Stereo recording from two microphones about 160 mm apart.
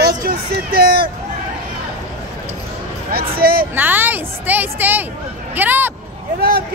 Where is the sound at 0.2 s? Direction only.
70° right (ahead or behind).